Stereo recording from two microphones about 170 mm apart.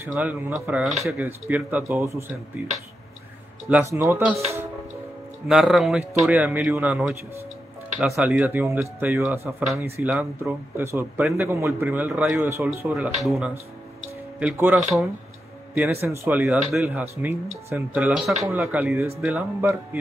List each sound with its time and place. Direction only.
0.0 s a man's voice: 10° right (ahead or behind)
3.8 s a man's voice: 15° right (ahead or behind)
5.5 s a man's voice: 5° right (ahead or behind)
8.2 s a man's voice: 10° right (ahead or behind)
12.9 s a man's voice: 5° right (ahead or behind)
14.8 s speech: centre (ahead or behind)
15.7 s a man's voice: 15° right (ahead or behind)